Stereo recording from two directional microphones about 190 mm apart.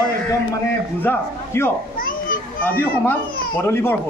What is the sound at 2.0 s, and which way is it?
Children playing, 45° left (ahead or behind).